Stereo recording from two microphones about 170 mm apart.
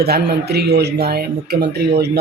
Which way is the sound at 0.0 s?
70° right (ahead or behind).